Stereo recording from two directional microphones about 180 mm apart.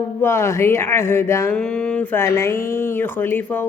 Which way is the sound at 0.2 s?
15° left (ahead or behind).